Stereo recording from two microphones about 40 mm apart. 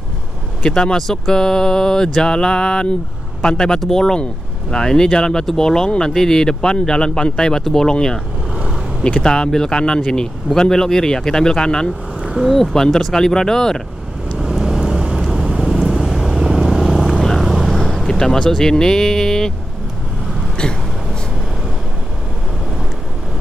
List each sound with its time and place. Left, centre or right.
0.6 s speech: centre
0.9 s speech: centre
9.2 s speech: centre
12.4 s speech: centre
12.7 s speech: centre
14.4 s vehicle: centre
17.8 s speech: centre
20.6 s a sound: left